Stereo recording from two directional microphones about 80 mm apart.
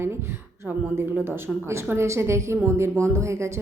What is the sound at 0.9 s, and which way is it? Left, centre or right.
Speech, right.